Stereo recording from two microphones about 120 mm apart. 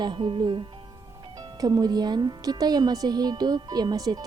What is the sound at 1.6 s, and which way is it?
Speech, 35° right (ahead or behind).